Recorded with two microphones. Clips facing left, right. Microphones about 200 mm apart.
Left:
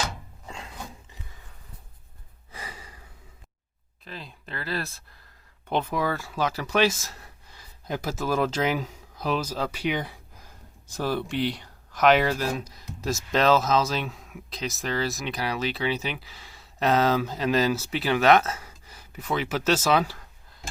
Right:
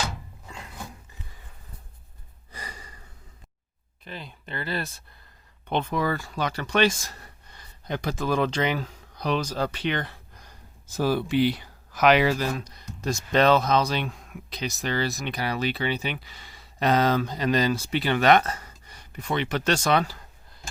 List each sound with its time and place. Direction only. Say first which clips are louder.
0.4 s gears: left 4 dB; 20° left (ahead or behind)
2.5 s gasp: left 1 dB; 5° left (ahead or behind)
4.0 s speech: right 1 dB; centre (ahead or behind)